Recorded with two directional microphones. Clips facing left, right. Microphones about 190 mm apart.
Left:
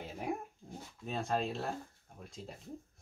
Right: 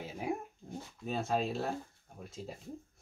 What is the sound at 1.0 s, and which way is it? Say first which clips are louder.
Speech: right 2 dB; centre (ahead or behind).